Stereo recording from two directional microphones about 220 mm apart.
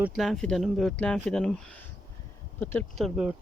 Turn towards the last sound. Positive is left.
turn(degrees=0)  # may be behind; listen again after turning